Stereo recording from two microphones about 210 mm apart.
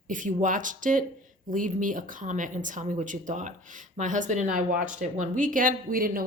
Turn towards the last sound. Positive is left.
turn(degrees=-45)  # may be behind; listen again after turning